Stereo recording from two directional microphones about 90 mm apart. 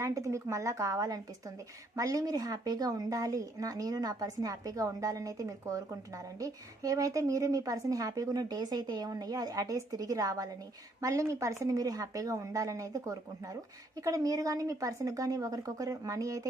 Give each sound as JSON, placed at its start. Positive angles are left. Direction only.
{"t": 0.0, "sound": "speech", "side_deg": -35}